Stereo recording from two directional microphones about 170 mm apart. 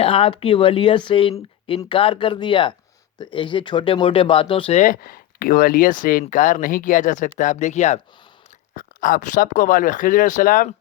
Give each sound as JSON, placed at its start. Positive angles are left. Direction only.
{"t": 0.0, "sound": "speech", "side_deg": 30}
{"t": 4.8, "sound": "speech", "side_deg": 55}
{"t": 8.7, "sound": "speech", "side_deg": 55}